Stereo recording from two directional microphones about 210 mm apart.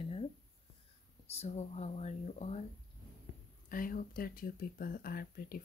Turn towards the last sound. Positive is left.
turn(degrees=45)  # may be behind; listen again after turning